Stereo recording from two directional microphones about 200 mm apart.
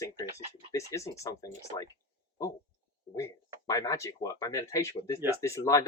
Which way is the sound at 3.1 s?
15° left (ahead or behind).